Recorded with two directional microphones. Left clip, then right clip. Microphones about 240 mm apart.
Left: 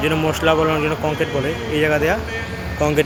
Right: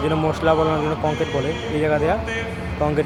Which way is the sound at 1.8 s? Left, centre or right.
Centre.